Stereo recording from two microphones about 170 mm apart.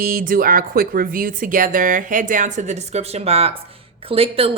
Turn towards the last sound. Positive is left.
turn(degrees=-35)  # may be behind; listen again after turning